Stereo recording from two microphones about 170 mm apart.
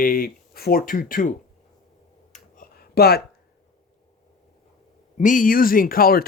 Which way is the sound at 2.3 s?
60° left (ahead or behind).